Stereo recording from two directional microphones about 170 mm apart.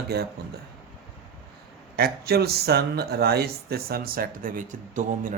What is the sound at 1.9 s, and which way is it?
Speech, 70° right (ahead or behind).